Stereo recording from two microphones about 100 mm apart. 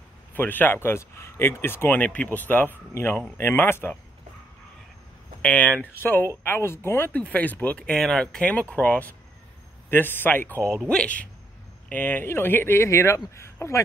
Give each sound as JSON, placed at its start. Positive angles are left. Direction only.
{"t": 0.3, "sound": "speech", "side_deg": 20}
{"t": 5.4, "sound": "speech", "side_deg": 15}